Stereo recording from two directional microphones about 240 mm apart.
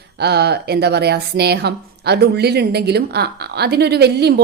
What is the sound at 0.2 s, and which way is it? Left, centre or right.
Speech, right.